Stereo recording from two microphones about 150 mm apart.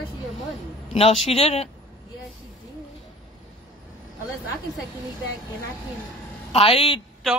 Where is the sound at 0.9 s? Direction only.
40° left (ahead or behind).